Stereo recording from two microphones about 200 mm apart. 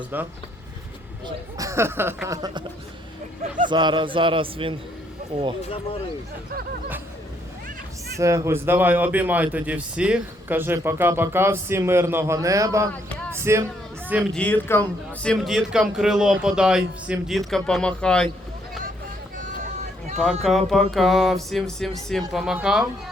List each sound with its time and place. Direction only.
0.1 s speech: 10° right (ahead or behind)
1.5 s speech: 15° right (ahead or behind)
3.7 s a man's voice: 25° right (ahead or behind)
5.6 s speech: 25° left (ahead or behind)
8.1 s speech: 15° right (ahead or behind)
14.3 s a man's voice: 10° left (ahead or behind)
19.4 s run: 40° right (ahead or behind)
20.4 s a man's voice: centre (ahead or behind)